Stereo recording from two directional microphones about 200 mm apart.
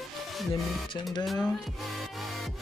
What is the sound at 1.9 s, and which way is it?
Music, centre (ahead or behind).